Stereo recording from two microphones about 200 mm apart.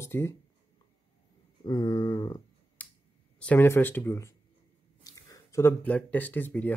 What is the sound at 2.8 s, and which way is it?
Finger snapping, 10° left (ahead or behind).